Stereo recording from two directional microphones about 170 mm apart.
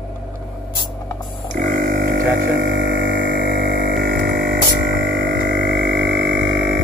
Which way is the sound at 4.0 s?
70° right (ahead or behind).